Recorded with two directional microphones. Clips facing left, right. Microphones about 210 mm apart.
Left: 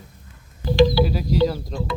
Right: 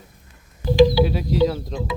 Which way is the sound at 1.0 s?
Centre (ahead or behind).